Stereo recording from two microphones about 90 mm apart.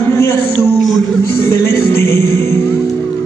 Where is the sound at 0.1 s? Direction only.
30° left (ahead or behind).